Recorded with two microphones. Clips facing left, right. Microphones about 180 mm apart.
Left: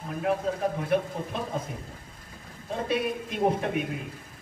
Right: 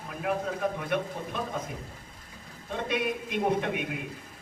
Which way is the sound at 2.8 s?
35° left (ahead or behind).